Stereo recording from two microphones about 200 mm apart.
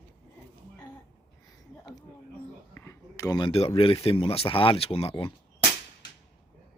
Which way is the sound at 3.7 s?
25° left (ahead or behind).